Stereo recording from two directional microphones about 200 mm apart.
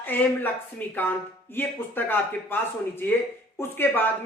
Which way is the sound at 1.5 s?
10° left (ahead or behind).